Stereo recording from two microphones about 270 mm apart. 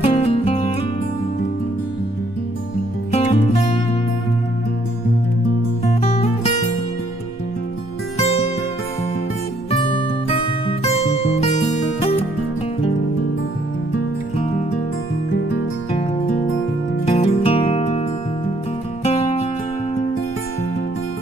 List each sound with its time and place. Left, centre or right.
0.0 s music: left
3.1 s music: left
5.9 s music: left
9.7 s music: centre
15.9 s music: left
19.0 s music: left